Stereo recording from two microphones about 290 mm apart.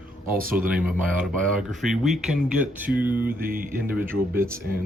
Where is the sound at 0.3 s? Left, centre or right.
Right.